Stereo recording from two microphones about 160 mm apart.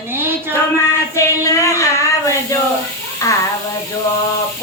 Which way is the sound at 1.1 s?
20° left (ahead or behind).